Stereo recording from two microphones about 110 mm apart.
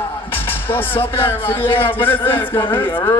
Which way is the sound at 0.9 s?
55° left (ahead or behind).